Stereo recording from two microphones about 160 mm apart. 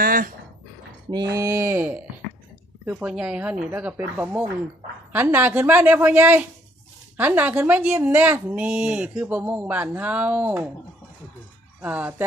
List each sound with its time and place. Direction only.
0.0 s dog: 65° right (ahead or behind)
1.1 s speech: 20° right (ahead or behind)
11.8 s speech: 10° right (ahead or behind)